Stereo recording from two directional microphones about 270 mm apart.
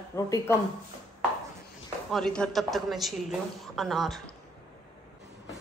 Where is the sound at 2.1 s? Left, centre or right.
Centre.